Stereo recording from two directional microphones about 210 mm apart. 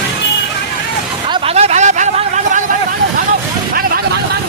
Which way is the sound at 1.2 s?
25° right (ahead or behind).